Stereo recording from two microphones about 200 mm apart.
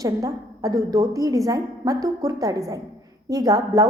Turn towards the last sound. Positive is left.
turn(degrees=-15)  # may be behind; listen again after turning